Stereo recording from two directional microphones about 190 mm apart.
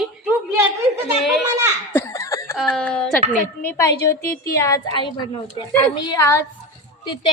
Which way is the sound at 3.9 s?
55° left (ahead or behind).